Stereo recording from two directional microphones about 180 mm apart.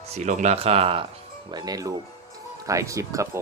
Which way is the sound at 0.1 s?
40° right (ahead or behind).